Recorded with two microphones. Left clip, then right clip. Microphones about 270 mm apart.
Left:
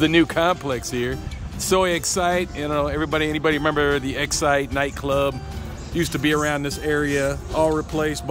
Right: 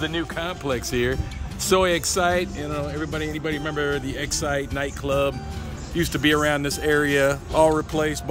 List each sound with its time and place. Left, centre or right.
0.0 s speech: left
0.7 s speech: centre